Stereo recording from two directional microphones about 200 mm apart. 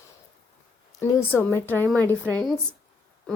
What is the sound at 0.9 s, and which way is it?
Speech, 10° left (ahead or behind).